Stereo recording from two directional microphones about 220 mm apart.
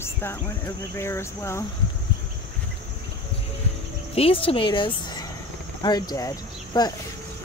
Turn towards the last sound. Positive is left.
turn(degrees=15)  # may be behind; listen again after turning